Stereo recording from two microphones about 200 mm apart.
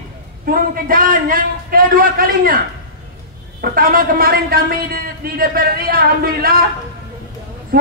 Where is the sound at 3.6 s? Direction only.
45° right (ahead or behind).